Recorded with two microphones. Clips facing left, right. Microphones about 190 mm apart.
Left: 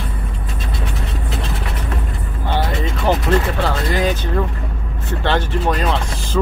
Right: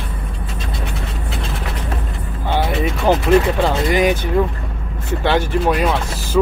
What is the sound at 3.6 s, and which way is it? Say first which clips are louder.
Speech: right 3 dB; 15° right (ahead or behind).